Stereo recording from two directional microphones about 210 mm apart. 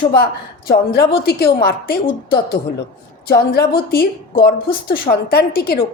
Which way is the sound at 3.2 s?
50° left (ahead or behind).